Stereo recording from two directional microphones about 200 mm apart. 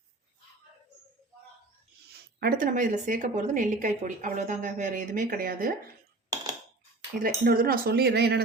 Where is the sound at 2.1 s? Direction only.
50° right (ahead or behind).